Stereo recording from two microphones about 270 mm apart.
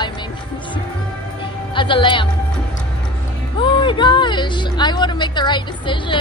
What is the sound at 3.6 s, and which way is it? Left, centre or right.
A woman's voice, centre.